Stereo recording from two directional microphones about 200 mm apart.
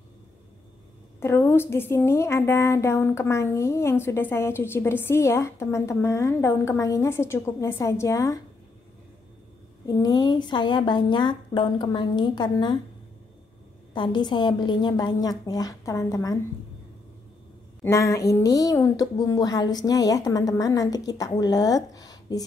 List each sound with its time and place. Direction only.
1.2 s a woman's voice: 15° left (ahead or behind)
10.0 s a woman's voice: 20° left (ahead or behind)
13.9 s a woman's voice: 25° left (ahead or behind)
17.8 s a woman's voice: 15° left (ahead or behind)